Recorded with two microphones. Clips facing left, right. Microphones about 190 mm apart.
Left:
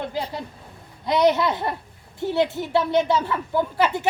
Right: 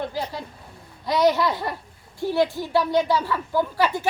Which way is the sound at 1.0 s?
20° left (ahead or behind).